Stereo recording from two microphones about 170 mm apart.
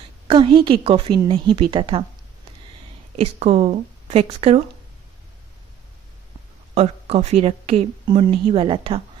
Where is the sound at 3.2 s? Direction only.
40° right (ahead or behind).